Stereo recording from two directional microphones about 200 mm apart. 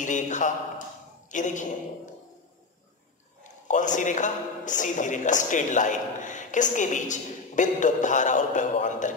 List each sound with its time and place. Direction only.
0.0 s a man's voice: 40° left (ahead or behind)
3.6 s a man's voice: 40° left (ahead or behind)